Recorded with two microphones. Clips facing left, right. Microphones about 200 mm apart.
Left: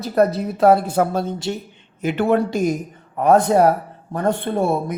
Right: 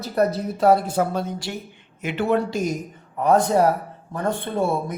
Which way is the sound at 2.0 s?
50° left (ahead or behind).